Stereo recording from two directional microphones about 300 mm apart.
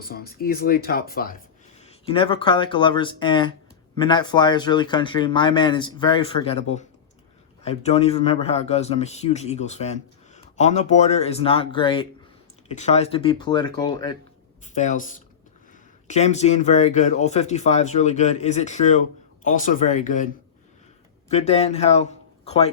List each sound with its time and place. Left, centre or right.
0.0 s speech: left
1.8 s a man's voice: centre
14.6 s a man's voice: left